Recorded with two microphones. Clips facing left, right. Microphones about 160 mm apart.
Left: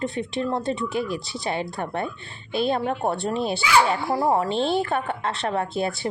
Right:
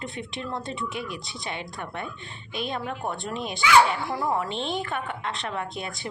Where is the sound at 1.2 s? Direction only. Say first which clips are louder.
Left 6 dB; centre (ahead or behind).